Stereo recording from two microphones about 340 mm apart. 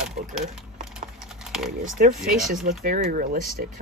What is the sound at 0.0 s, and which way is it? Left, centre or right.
Speech, centre.